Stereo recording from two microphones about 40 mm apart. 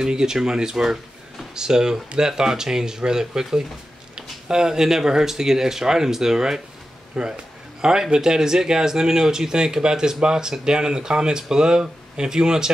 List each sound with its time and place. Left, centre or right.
0.0 s speech: centre